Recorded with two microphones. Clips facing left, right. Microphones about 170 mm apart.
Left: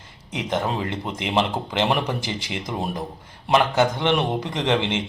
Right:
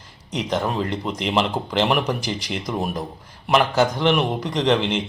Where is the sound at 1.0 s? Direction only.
20° left (ahead or behind).